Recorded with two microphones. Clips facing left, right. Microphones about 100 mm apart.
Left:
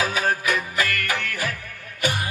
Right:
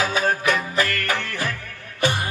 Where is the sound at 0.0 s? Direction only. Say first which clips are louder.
Right 2 dB; 30° right (ahead or behind).